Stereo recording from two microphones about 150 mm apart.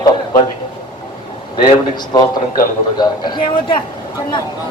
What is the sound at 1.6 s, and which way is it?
A man's voice, 25° left (ahead or behind).